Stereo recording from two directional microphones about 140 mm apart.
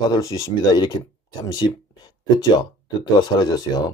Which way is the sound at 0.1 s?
25° left (ahead or behind).